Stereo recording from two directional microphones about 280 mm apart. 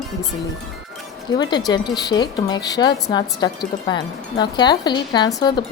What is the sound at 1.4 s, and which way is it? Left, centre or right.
A woman's voice, centre.